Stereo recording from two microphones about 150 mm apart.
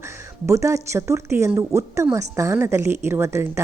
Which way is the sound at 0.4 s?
20° right (ahead or behind).